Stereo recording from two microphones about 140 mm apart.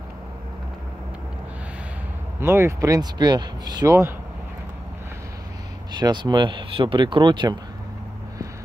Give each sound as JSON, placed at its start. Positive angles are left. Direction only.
{"t": 2.4, "sound": "speech", "side_deg": -20}
{"t": 5.9, "sound": "speech", "side_deg": -30}